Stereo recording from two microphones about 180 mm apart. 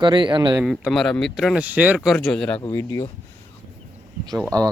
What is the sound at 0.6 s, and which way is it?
Speech, centre (ahead or behind).